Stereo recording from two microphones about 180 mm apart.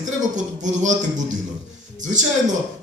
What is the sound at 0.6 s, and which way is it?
Speech, 45° right (ahead or behind).